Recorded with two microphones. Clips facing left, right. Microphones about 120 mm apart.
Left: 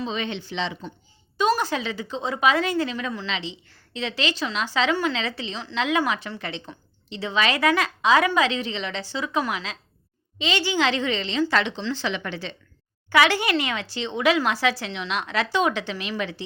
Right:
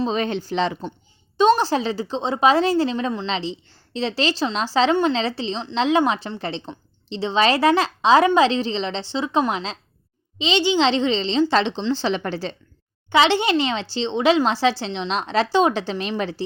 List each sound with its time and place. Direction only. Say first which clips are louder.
0.0 s speech: right 6 dB; 40° right (ahead or behind)
1.4 s speech: right 6 dB; 30° right (ahead or behind)
13.1 s speech: right 3 dB; 25° right (ahead or behind)